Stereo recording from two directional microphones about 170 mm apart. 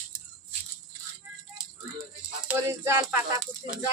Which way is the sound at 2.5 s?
15° right (ahead or behind).